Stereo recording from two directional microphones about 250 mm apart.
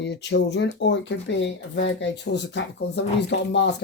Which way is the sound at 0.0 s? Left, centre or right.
Left.